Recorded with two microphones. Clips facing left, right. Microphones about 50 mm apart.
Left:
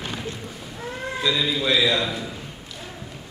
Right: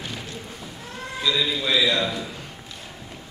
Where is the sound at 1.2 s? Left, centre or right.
Centre.